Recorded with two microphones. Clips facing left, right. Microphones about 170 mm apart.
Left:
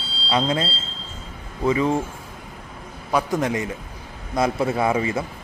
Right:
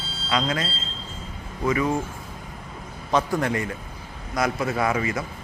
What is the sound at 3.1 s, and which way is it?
Speech, 15° left (ahead or behind).